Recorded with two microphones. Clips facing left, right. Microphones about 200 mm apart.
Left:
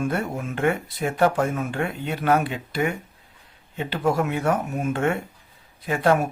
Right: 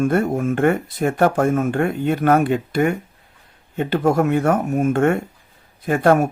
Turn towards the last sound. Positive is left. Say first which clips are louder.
# right 5 dB
turn(degrees=-45)  # may be behind; listen again after turning